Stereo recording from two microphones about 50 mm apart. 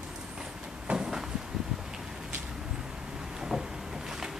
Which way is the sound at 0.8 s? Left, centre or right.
Centre.